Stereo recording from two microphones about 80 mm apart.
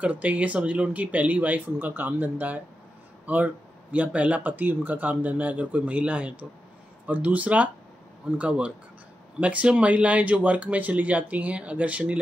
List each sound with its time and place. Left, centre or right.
0.0 s speech: centre